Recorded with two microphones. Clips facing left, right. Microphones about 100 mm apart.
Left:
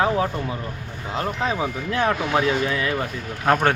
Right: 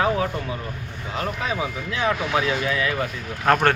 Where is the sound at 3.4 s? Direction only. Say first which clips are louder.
Even; 10° left (ahead or behind).